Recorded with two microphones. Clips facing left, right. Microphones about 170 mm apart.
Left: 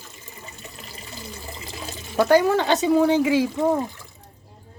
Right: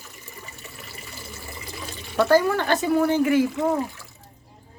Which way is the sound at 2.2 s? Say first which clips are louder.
Left 2 dB; 15° left (ahead or behind).